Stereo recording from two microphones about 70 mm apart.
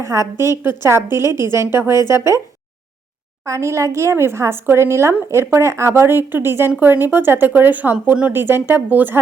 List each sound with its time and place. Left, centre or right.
0.0 s a woman's voice: right
3.4 s a woman's voice: right